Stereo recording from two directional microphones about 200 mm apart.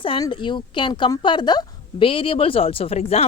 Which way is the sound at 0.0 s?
25° left (ahead or behind).